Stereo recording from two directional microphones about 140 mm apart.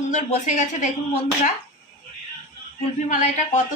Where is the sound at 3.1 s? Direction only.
60° left (ahead or behind).